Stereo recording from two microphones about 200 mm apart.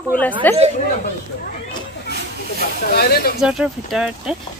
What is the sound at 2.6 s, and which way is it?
Speech, 50° left (ahead or behind).